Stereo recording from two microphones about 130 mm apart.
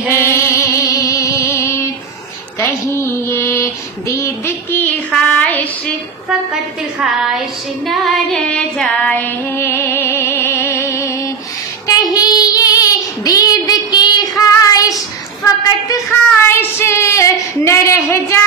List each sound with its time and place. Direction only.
0.1 s music: 20° left (ahead or behind)
2.6 s child singing: 20° left (ahead or behind)
6.2 s female singing: 5° right (ahead or behind); by 11.1 s 20° left (ahead or behind)
11.9 s child singing: 30° left (ahead or behind)
15.4 s a sound: 20° left (ahead or behind)